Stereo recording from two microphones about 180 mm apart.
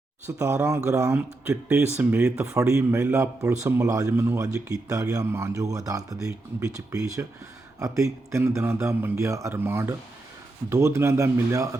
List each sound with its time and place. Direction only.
0.3 s a man's voice: 15° right (ahead or behind)
1.1 s a man's voice: 5° right (ahead or behind)